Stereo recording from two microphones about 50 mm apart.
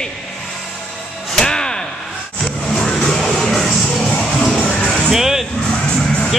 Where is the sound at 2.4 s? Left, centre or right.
Centre.